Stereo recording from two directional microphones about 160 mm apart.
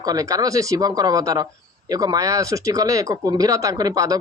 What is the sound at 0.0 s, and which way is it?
Speech, 25° right (ahead or behind).